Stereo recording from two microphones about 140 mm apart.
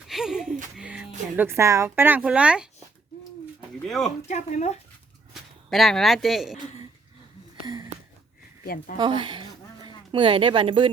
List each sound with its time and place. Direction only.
0.1 s a sound: 5° right (ahead or behind)
0.8 s music: 5° right (ahead or behind)
1.4 s speech: 20° right (ahead or behind)
3.8 s speech: centre (ahead or behind)
4.3 s speech: 55° left (ahead or behind)
5.3 s speech: centre (ahead or behind)
8.6 s speech: 90° left
9.0 s speech: 35° right (ahead or behind)